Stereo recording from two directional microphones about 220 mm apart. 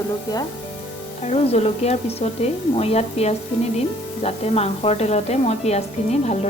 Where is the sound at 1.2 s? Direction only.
30° left (ahead or behind).